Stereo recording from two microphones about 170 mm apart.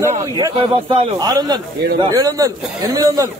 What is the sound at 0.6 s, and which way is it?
A man's voice, 35° right (ahead or behind).